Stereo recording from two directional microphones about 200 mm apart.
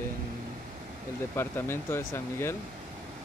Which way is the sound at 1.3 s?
10° left (ahead or behind).